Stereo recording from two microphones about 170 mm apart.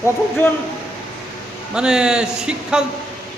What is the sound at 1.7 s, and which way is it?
Speech, 5° right (ahead or behind).